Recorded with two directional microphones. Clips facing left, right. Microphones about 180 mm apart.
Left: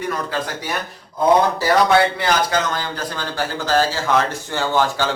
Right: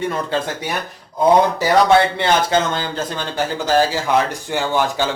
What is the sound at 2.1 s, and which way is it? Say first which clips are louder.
A man's voice: right 3 dB; 25° right (ahead or behind).